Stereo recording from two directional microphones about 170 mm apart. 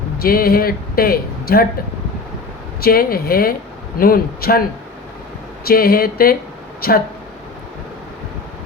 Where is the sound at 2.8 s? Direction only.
60° left (ahead or behind).